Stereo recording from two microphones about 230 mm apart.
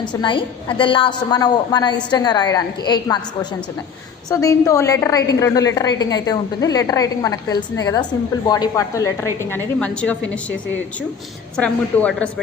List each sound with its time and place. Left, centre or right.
0.1 s a woman's voice: centre
4.3 s a woman's voice: centre
11.5 s a woman's voice: centre